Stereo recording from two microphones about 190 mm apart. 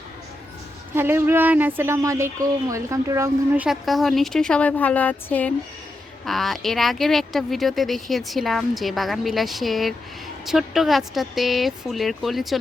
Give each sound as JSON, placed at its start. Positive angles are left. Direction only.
{"t": 0.9, "sound": "speech", "side_deg": -10}